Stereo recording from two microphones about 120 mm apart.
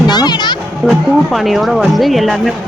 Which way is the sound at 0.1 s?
35° left (ahead or behind).